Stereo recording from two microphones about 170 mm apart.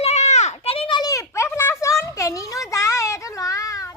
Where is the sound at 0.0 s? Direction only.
40° left (ahead or behind).